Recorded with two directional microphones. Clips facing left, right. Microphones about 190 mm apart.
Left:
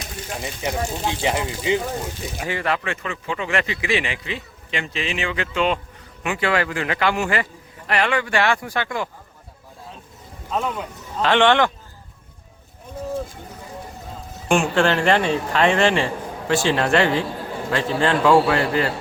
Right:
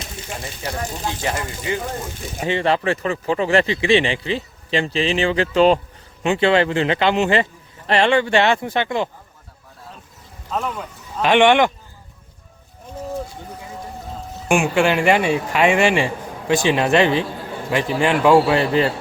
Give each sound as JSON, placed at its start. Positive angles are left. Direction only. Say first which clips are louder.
{"t": 0.4, "sound": "speech", "louder": "left 3 dB", "side_deg": 15}
{"t": 2.5, "sound": "speech", "louder": "right 6 dB", "side_deg": -25}
{"t": 10.5, "sound": "speech", "louder": "even", "side_deg": 0}
{"t": 11.2, "sound": "speech", "louder": "right 3 dB", "side_deg": -15}
{"t": 14.4, "sound": "speech", "louder": "right 1 dB", "side_deg": -10}